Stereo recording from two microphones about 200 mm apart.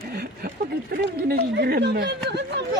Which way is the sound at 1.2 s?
50° right (ahead or behind).